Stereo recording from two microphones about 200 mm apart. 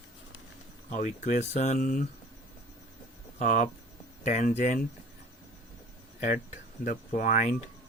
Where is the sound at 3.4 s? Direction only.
40° left (ahead or behind).